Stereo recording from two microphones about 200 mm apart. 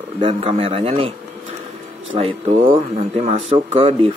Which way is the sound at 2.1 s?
30° right (ahead or behind).